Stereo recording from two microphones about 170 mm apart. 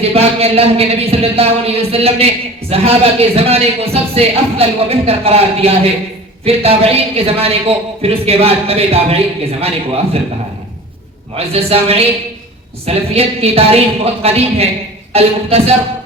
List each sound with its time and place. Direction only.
0.0 s speech: 35° right (ahead or behind)
11.3 s speech: 35° right (ahead or behind)